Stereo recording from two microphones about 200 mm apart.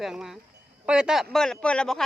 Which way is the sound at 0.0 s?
Centre (ahead or behind).